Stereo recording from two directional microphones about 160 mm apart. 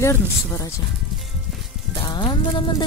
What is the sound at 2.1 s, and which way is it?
Music, 25° left (ahead or behind).